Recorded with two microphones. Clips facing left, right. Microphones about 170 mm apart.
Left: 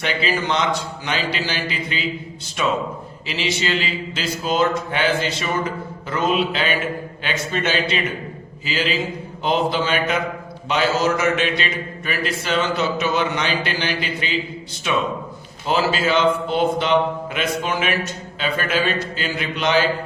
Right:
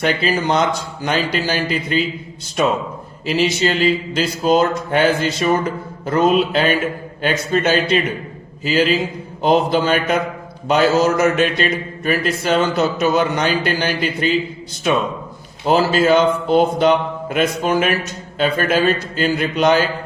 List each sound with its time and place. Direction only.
0.0 s speech: 45° right (ahead or behind)